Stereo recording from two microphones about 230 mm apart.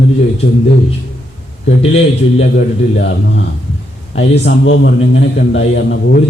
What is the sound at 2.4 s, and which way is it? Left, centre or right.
A man's voice, left.